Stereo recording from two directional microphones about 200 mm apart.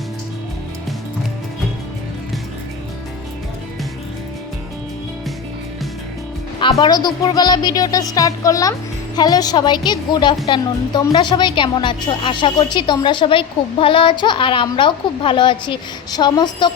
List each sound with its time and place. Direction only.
6.6 s a woman's voice: 25° left (ahead or behind)